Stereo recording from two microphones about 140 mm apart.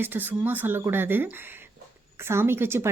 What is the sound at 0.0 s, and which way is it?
Speech, 15° right (ahead or behind).